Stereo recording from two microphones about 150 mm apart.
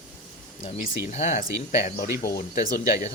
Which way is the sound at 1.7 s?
60° left (ahead or behind).